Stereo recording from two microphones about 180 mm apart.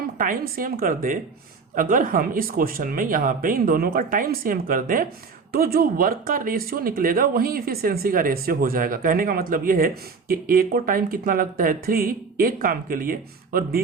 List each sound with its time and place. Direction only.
0.2 s speech: 50° right (ahead or behind)